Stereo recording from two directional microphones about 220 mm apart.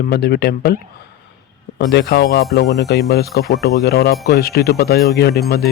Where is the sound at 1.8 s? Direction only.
50° left (ahead or behind).